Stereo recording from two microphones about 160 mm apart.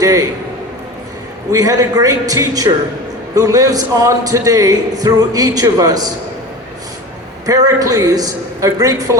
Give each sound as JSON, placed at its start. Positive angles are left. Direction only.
{"t": 0.0, "sound": "a man's voice", "side_deg": -20}
{"t": 1.5, "sound": "speech", "side_deg": -20}
{"t": 7.4, "sound": "speech", "side_deg": -20}